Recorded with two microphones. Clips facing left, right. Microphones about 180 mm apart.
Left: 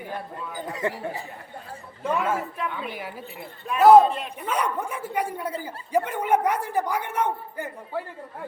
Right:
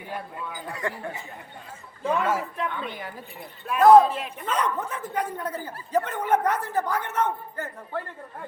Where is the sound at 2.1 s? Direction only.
5° left (ahead or behind).